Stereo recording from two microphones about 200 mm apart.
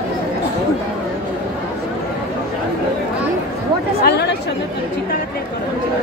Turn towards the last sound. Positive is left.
turn(degrees=55)  # may be behind; listen again after turning